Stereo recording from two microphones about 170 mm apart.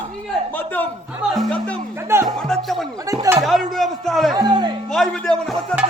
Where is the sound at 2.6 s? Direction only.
Centre (ahead or behind).